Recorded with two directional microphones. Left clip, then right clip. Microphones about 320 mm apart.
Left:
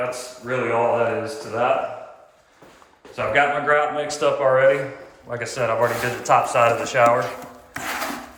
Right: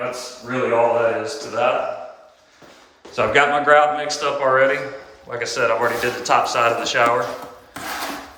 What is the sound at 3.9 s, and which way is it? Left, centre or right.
Speech, centre.